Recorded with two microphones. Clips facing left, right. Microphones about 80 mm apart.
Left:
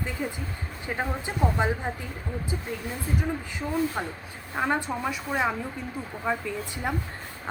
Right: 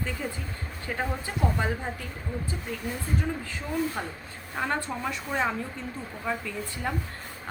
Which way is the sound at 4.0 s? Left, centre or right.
Centre.